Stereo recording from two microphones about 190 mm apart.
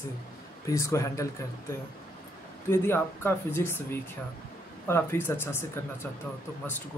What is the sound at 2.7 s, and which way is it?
Speech, 10° left (ahead or behind).